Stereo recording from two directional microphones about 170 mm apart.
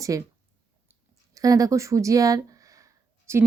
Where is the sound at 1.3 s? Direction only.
20° right (ahead or behind).